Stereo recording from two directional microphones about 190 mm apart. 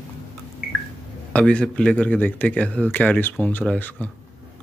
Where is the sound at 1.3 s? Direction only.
5° left (ahead or behind).